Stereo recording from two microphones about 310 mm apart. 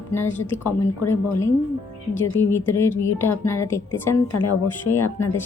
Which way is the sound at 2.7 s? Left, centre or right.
Centre.